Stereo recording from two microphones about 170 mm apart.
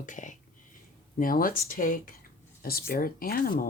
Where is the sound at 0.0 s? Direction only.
50° left (ahead or behind).